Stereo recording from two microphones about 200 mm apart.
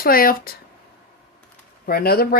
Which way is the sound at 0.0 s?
45° left (ahead or behind).